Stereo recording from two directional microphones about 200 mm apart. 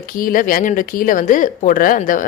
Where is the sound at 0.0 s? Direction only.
45° left (ahead or behind).